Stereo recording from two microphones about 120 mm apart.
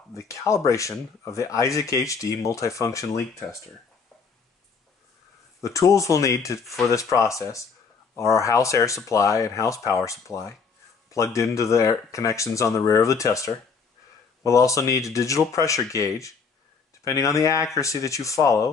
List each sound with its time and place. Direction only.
0.1 s speech: 25° left (ahead or behind)
5.6 s speech: 25° left (ahead or behind)